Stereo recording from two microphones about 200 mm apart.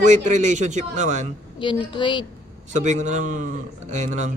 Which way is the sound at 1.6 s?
25° left (ahead or behind).